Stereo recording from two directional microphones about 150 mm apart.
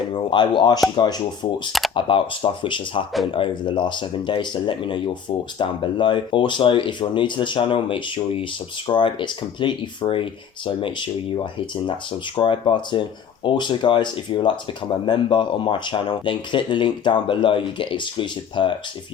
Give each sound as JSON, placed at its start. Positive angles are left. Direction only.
{"t": 0.1, "sound": "speech", "side_deg": 30}